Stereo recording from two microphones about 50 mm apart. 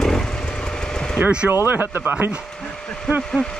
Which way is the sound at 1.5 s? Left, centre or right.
Right.